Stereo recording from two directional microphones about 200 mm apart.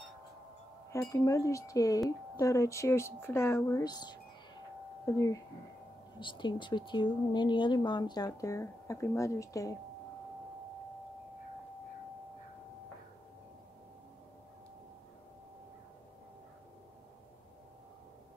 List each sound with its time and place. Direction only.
0.9 s speech: 15° left (ahead or behind)